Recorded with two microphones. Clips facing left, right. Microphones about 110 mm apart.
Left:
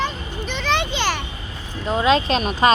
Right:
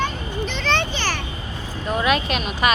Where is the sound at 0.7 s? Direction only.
15° left (ahead or behind).